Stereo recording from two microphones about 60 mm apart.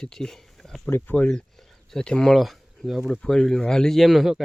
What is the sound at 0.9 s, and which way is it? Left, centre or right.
Speech, left.